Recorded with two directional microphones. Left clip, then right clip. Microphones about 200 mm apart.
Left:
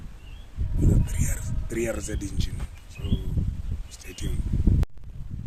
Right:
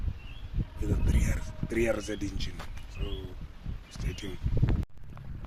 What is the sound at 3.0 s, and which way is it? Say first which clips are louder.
Bird: left 5 dB; 15° left (ahead or behind).